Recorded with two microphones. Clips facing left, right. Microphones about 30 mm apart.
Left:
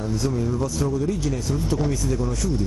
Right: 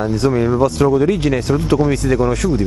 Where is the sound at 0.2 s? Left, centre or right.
Right.